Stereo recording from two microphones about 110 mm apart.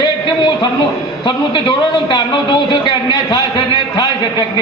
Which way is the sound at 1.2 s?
45° left (ahead or behind).